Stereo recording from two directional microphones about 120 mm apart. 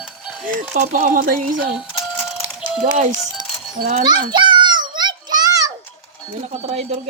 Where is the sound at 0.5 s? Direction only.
90° right.